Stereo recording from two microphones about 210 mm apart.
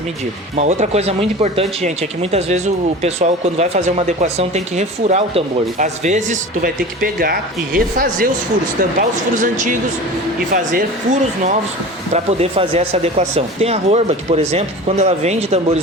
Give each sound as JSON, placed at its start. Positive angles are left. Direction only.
{"t": 0.5, "sound": "speech", "side_deg": -35}